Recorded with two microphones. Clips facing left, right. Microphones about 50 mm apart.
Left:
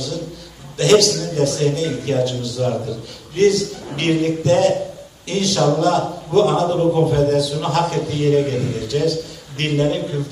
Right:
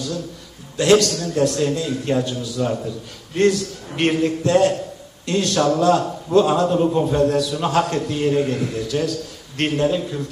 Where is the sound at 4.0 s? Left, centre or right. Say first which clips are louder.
Left 1 dB; centre.